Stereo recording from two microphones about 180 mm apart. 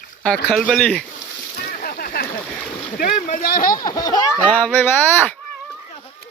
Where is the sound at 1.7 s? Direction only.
55° left (ahead or behind).